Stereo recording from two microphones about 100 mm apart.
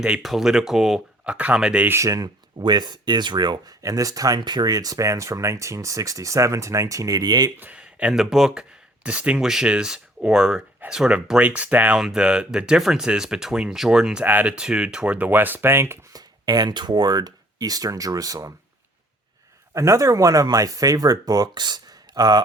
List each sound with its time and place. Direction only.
0.2 s speech: centre (ahead or behind)
1.9 s speech: 30° right (ahead or behind)
7.6 s speech: 10° right (ahead or behind)
16.1 s speech: 45° right (ahead or behind)
19.7 s speech: 30° right (ahead or behind)